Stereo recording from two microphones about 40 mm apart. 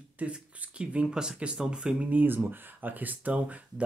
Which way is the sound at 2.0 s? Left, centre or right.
Right.